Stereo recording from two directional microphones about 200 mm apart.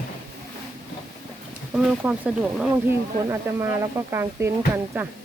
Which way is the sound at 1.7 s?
5° right (ahead or behind).